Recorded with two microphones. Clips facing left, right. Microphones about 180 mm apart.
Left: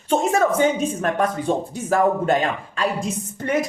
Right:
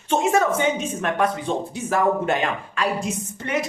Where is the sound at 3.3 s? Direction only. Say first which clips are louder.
Left 5 dB; 45° left (ahead or behind).